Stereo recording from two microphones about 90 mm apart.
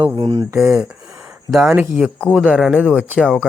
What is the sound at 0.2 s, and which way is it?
Speech, 70° right (ahead or behind).